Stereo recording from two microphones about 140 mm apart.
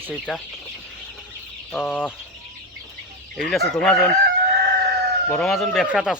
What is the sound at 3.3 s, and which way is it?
Speech, centre (ahead or behind).